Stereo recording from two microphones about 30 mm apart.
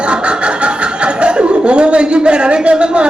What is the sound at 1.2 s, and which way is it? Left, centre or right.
Speech, right.